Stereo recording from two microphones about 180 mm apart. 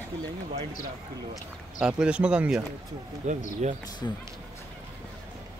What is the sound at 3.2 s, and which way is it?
Speech, 40° right (ahead or behind).